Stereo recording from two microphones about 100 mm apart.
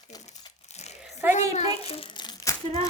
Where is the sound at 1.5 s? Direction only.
90° left.